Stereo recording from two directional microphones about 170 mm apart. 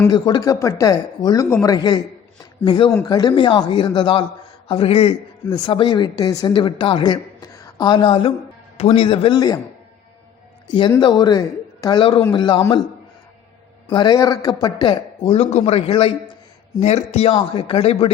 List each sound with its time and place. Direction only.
0.0 s a man's voice: 25° left (ahead or behind)
10.7 s a man's voice: 25° left (ahead or behind)
13.9 s a man's voice: 25° left (ahead or behind)